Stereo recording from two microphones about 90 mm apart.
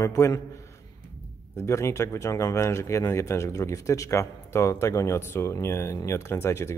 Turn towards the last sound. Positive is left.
turn(degrees=30)  # may be behind; listen again after turning